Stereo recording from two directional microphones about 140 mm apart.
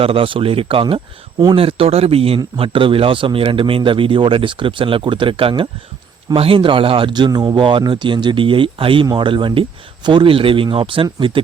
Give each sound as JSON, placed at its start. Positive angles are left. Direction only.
{"t": 0.0, "sound": "speech", "side_deg": -40}